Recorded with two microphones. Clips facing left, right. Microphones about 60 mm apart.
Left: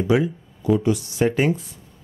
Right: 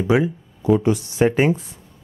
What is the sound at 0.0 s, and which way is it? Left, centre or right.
Speech, right.